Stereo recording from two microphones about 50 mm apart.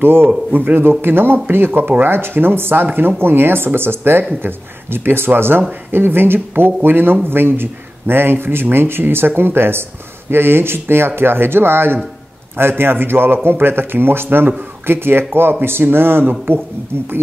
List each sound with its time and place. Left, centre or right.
0.0 s speech: right
0.5 s speech: right